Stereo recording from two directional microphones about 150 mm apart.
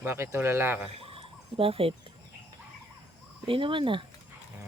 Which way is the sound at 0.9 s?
40° right (ahead or behind).